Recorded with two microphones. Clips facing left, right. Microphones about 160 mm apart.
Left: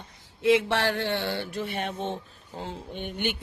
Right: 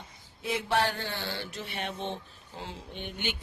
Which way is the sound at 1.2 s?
50° left (ahead or behind).